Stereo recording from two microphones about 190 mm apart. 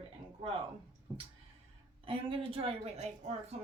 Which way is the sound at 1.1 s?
10° right (ahead or behind).